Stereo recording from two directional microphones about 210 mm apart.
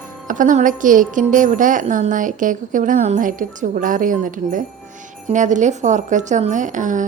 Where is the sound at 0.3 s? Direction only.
40° right (ahead or behind).